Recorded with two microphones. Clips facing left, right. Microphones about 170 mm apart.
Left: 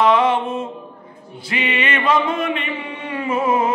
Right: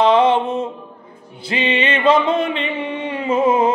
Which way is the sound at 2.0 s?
25° right (ahead or behind).